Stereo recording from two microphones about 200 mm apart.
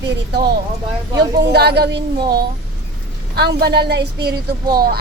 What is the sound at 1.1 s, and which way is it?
A woman's voice, 55° right (ahead or behind).